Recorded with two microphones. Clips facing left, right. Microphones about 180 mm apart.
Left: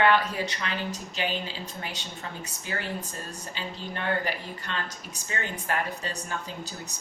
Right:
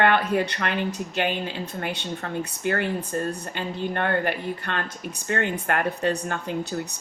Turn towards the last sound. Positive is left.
turn(degrees=-60)  # may be behind; listen again after turning